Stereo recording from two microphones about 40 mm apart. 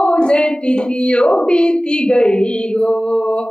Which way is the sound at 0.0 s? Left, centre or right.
Left.